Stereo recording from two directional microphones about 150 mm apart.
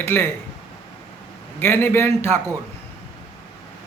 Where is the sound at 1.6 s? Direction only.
15° left (ahead or behind).